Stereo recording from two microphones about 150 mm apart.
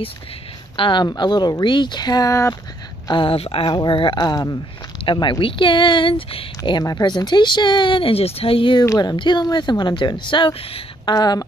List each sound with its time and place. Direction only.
0.7 s speech: 30° left (ahead or behind)
3.1 s speech: 35° left (ahead or behind)
8.8 s speech: 25° left (ahead or behind)